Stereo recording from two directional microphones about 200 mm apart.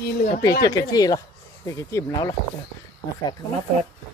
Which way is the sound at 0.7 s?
20° left (ahead or behind).